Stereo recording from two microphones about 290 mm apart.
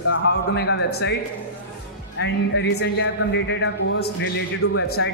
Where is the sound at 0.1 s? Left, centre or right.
Left.